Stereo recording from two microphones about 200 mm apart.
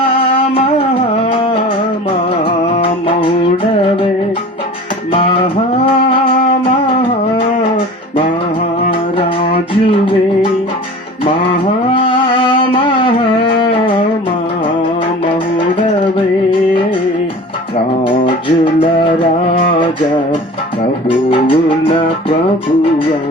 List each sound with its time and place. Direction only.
0.0 s music: 30° left (ahead or behind)
2.7 s music: 25° left (ahead or behind)
5.1 s music: 25° left (ahead or behind)
8.9 s music: 25° left (ahead or behind)
11.3 s a sound: 25° left (ahead or behind)
13.6 s music: 25° left (ahead or behind)
16.1 s music: 25° left (ahead or behind)
18.6 s music: 25° left (ahead or behind)
21.2 s music: 25° left (ahead or behind)